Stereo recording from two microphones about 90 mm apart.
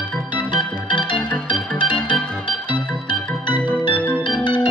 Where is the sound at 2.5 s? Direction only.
65° left (ahead or behind).